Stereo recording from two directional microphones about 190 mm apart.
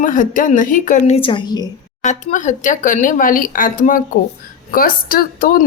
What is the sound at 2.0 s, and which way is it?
A woman's voice, 40° left (ahead or behind).